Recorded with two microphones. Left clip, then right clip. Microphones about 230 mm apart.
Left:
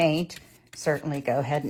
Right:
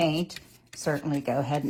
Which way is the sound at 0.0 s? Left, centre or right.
Left.